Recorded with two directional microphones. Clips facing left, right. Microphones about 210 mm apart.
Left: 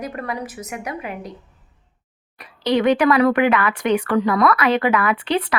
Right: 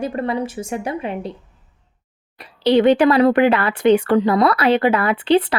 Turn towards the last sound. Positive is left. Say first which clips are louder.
# right 5 dB
turn(degrees=-30)  # may be behind; listen again after turning